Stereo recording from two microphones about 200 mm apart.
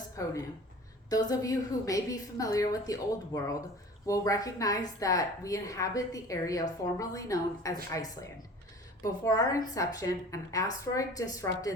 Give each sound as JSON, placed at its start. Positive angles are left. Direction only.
{"t": 0.2, "sound": "a woman's voice", "side_deg": 15}